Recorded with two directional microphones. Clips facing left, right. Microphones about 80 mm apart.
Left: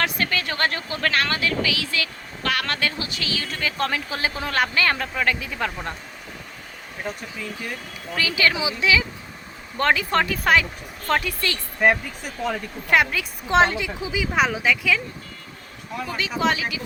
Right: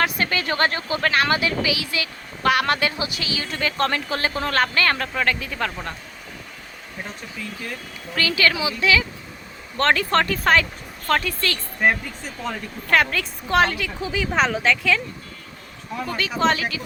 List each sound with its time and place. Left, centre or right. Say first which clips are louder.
0.0 s speech: right 2 dB; centre
8.1 s a woman's voice: right 1 dB; centre
11.8 s a woman's voice: left 1 dB; centre
13.5 s a woman's voice: left 1 dB; left
14.0 s a woman's voice: right 1 dB; centre